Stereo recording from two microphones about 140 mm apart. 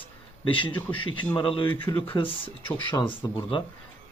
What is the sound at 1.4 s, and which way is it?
Speech, 35° left (ahead or behind).